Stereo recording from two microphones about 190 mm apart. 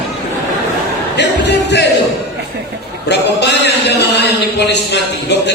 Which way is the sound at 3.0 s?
65° left (ahead or behind).